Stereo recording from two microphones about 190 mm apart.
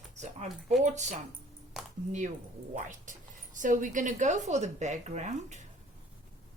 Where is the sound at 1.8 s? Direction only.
Centre (ahead or behind).